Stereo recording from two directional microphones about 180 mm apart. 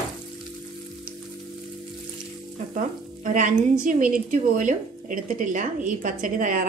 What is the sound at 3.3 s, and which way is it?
A woman's voice, 45° right (ahead or behind).